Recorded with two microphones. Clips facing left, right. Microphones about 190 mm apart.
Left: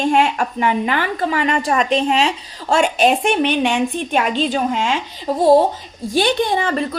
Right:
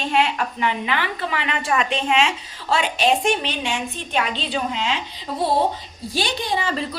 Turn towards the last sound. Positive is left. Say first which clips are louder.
# left 6 dB
turn(degrees=55)  # may be behind; listen again after turning